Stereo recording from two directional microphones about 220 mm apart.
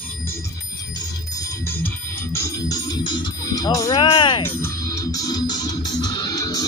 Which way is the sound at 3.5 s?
15° left (ahead or behind).